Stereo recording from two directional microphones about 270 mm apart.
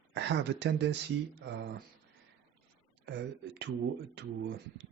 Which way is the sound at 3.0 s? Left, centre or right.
Right.